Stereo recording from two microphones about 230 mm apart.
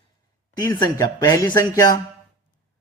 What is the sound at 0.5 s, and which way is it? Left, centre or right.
Speech, centre.